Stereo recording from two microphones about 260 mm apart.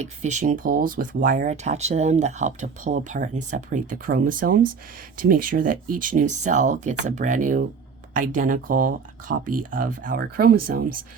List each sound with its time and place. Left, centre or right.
0.0 s speech: right